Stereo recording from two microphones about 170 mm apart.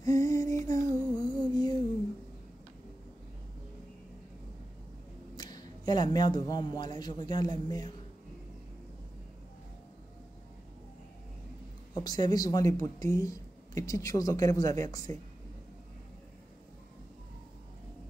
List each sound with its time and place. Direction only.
0.0 s a sound: 20° left (ahead or behind)
5.3 s a man's voice: 25° left (ahead or behind)
11.9 s speech: 25° left (ahead or behind)